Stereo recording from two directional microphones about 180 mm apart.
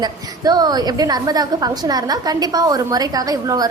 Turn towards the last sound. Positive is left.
turn(degrees=-20)  # may be behind; listen again after turning